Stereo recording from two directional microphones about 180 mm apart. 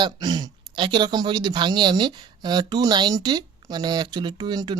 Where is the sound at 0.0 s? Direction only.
20° right (ahead or behind).